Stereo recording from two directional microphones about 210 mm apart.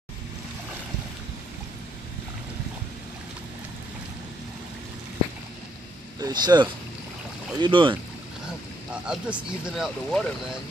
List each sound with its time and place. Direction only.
6.1 s speech: 20° right (ahead or behind)
8.9 s speech: 5° right (ahead or behind)